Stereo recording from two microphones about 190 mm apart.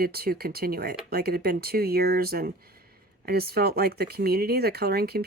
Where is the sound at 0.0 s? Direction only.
55° right (ahead or behind).